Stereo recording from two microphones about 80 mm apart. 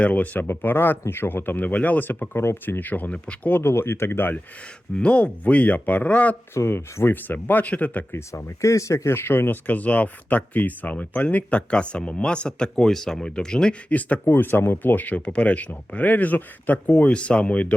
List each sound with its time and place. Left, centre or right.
0.0 s speech: centre
4.9 s speech: centre
6.5 s speech: left
8.1 s speech: left; by 13.7 s centre
13.9 s speech: centre